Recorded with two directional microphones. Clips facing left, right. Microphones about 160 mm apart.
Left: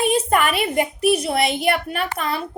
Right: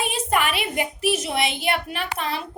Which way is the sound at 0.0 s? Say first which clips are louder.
Left 5 dB; 45° left (ahead or behind).